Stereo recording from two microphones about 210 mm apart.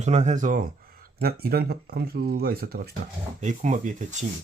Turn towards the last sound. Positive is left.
turn(degrees=-35)  # may be behind; listen again after turning